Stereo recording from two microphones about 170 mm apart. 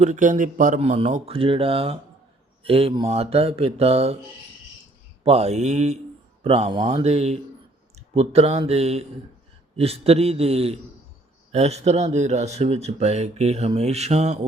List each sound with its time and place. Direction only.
0.0 s speech: 45° right (ahead or behind)
0.8 s speech: 40° right (ahead or behind)
5.2 s speech: 40° right (ahead or behind)